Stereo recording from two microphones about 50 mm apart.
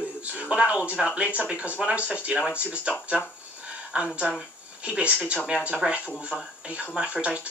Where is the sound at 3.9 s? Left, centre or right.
Centre.